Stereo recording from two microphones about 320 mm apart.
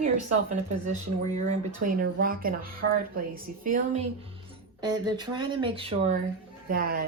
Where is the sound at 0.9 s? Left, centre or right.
Right.